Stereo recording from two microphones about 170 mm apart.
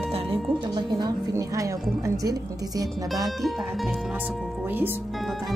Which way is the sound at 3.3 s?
Centre (ahead or behind).